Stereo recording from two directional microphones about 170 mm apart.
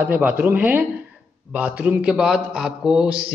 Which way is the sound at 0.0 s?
10° right (ahead or behind).